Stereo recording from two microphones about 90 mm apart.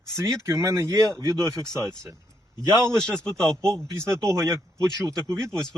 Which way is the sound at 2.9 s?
10° left (ahead or behind).